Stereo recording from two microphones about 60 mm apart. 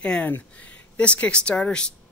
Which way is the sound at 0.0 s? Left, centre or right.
Centre.